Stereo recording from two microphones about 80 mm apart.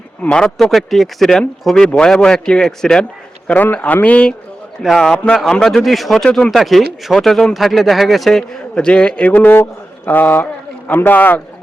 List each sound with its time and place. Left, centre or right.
0.2 s a man's voice: centre
0.6 s a man's voice: centre
4.8 s speech: centre
5.1 s a man's voice: centre